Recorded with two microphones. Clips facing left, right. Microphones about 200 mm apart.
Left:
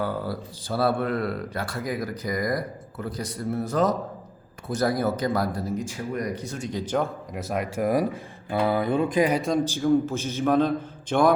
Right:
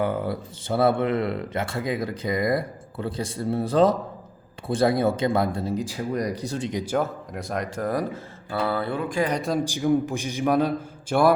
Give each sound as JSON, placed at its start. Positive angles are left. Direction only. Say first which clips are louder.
{"t": 0.0, "sound": "speech", "louder": "right 3 dB", "side_deg": -20}
{"t": 6.7, "sound": "a man's voice", "louder": "right 2 dB", "side_deg": -15}
{"t": 6.9, "sound": "speech", "louder": "left 1 dB", "side_deg": 0}
{"t": 8.4, "sound": "mantra", "louder": "left 3 dB", "side_deg": 15}
{"t": 9.0, "sound": "speech", "louder": "left 3 dB", "side_deg": 20}
{"t": 9.3, "sound": "speech", "louder": "left 1 dB", "side_deg": 0}
{"t": 9.6, "sound": "a man's voice", "louder": "left 1 dB", "side_deg": -15}